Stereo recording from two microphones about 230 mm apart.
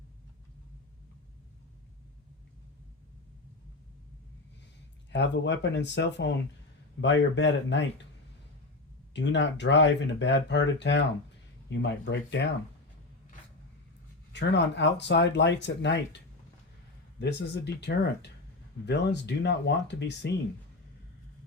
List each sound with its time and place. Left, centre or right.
5.1 s speech: left
9.1 s speech: left
14.3 s speech: left